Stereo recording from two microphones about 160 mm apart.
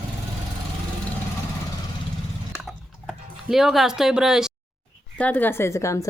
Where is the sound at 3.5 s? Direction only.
Centre (ahead or behind).